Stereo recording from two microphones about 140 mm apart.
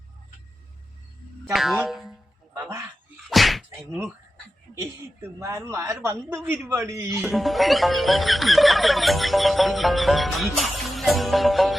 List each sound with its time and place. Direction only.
1.5 s speech: centre (ahead or behind)
2.6 s a sound: 20° right (ahead or behind)
3.2 s whip: centre (ahead or behind)
5.4 s speech: 20° right (ahead or behind)
7.2 s speech: centre (ahead or behind)